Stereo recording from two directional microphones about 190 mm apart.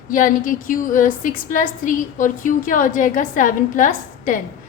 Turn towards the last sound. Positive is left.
turn(degrees=45)  # may be behind; listen again after turning